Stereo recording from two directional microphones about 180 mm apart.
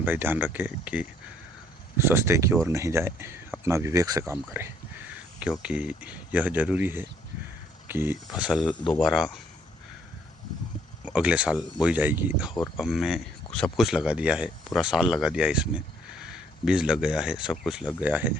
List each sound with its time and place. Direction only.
0.0 s speech: 10° right (ahead or behind)
8.5 s speech: 25° left (ahead or behind)
8.9 s speech: centre (ahead or behind)
11.0 s speech: 5° right (ahead or behind)